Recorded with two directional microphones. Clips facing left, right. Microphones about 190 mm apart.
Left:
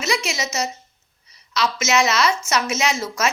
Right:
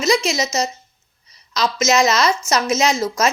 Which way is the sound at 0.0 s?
35° right (ahead or behind).